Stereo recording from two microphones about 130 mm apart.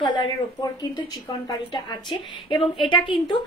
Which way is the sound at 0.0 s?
35° left (ahead or behind).